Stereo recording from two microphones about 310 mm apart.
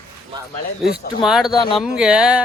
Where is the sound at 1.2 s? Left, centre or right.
Centre.